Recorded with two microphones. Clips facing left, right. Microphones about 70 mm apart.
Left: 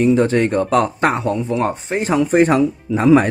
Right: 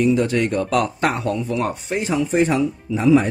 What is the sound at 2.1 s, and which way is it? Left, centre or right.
Speech, left.